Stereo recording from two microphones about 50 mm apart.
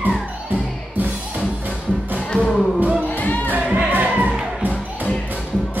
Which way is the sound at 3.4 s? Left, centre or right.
Right.